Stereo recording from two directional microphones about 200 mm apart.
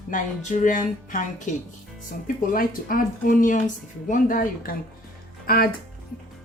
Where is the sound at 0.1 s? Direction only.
40° left (ahead or behind).